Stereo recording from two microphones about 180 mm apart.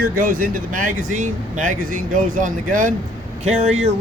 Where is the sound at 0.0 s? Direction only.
50° right (ahead or behind).